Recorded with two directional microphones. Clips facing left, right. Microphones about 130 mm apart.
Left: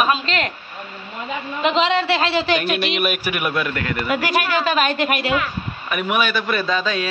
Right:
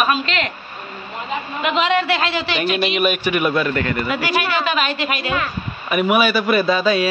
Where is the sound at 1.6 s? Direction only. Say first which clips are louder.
Even; 30° left (ahead or behind).